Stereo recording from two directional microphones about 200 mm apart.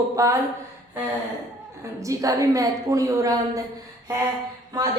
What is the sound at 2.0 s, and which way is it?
A woman's voice, 15° right (ahead or behind).